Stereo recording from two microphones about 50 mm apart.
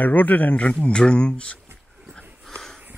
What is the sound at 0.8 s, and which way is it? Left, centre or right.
Speech, left.